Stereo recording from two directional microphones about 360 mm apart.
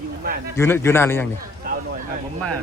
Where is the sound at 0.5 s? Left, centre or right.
Centre.